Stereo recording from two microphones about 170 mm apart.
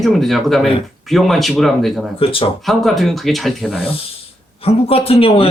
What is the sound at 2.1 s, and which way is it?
Speech, 35° left (ahead or behind).